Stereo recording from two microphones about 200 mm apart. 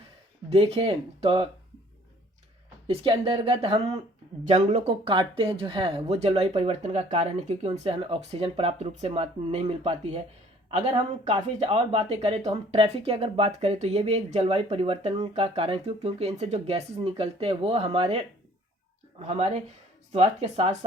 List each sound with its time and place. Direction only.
0.5 s speech: 30° right (ahead or behind)
2.8 s speech: 25° right (ahead or behind)
19.3 s speech: 30° right (ahead or behind)